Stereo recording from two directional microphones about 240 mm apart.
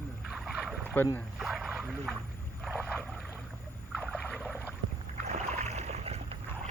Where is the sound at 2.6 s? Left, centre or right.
Centre.